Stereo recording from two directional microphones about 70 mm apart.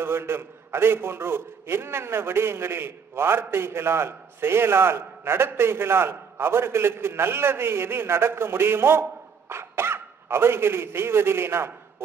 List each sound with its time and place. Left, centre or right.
0.0 s a man's voice: right